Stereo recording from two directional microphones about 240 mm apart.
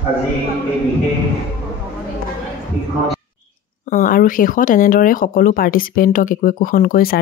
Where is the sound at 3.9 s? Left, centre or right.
Left.